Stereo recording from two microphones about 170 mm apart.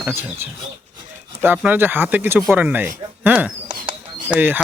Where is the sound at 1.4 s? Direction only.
10° right (ahead or behind).